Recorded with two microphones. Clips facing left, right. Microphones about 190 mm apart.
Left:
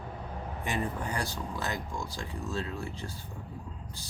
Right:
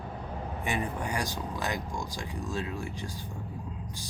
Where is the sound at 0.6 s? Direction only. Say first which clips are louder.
Right 1 dB; 15° right (ahead or behind).